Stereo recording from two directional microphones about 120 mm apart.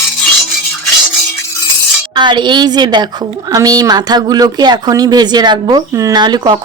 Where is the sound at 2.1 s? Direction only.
40° right (ahead or behind).